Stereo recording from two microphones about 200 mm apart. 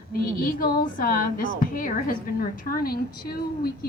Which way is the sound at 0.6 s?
45° left (ahead or behind).